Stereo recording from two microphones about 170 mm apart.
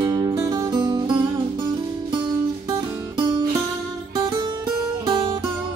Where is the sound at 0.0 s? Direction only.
20° right (ahead or behind).